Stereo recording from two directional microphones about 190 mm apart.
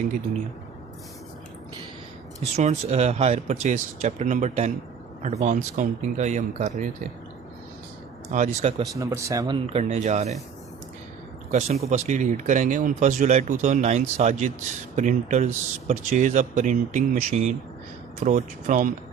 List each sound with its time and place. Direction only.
2.4 s speech: 35° right (ahead or behind)
8.3 s speech: 45° right (ahead or behind)
8.8 s speech: 15° right (ahead or behind)
9.7 s speech: 35° right (ahead or behind)
11.5 s speech: 35° right (ahead or behind)